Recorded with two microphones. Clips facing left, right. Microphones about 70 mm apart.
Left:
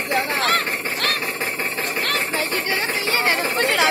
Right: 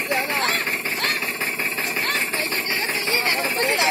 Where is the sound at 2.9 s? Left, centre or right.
Left.